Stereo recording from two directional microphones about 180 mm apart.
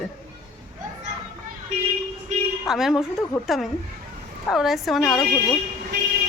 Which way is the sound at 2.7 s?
Centre (ahead or behind).